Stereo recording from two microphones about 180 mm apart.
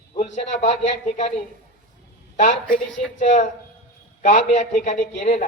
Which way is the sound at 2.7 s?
Centre (ahead or behind).